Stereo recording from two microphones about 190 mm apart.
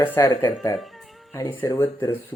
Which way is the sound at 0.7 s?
Centre (ahead or behind).